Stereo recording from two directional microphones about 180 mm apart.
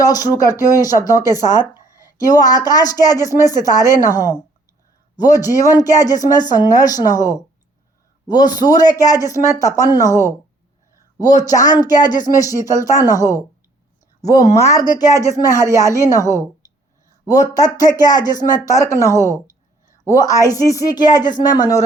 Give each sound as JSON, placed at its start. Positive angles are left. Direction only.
{"t": 0.0, "sound": "speech", "side_deg": 20}
{"t": 11.2, "sound": "speech", "side_deg": 20}